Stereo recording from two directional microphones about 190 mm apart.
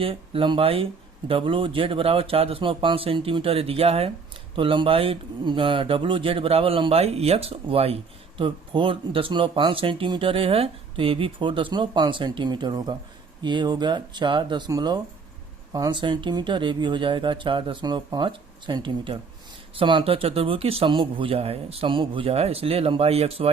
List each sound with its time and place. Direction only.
0.0 s speech: 30° right (ahead or behind)